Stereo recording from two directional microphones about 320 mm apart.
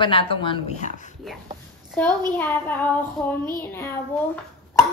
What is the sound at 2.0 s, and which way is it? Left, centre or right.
A woman's voice, centre.